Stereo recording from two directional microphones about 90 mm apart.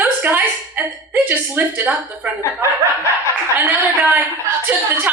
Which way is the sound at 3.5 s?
25° right (ahead or behind).